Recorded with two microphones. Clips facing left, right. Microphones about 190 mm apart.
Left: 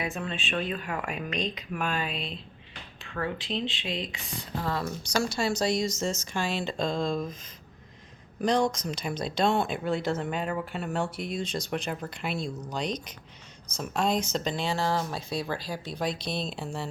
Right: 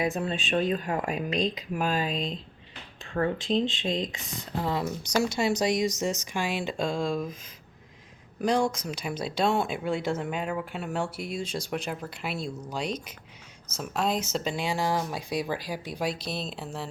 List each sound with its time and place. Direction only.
0.0 s speech: 35° right (ahead or behind)
3.3 s speech: 45° right (ahead or behind)
4.2 s speech: 20° right (ahead or behind)
8.4 s speech: 10° right (ahead or behind)